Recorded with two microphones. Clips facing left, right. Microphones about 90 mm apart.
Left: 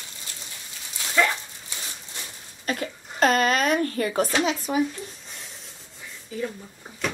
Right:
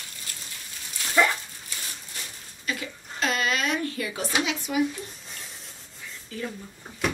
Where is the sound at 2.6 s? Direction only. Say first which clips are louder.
Left 4 dB; 45° left (ahead or behind).